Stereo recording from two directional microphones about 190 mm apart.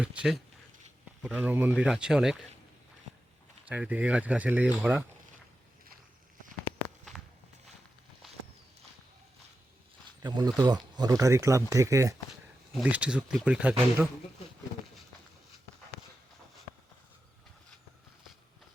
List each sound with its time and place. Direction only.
0.0 s speech: 5° right (ahead or behind)
3.7 s speech: 10° right (ahead or behind)
10.2 s speech: 20° right (ahead or behind)
12.7 s speech: 5° right (ahead or behind)